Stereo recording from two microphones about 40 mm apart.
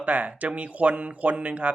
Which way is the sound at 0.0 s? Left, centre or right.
Right.